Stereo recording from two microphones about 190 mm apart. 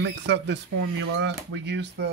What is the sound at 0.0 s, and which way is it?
Speech, 70° right (ahead or behind).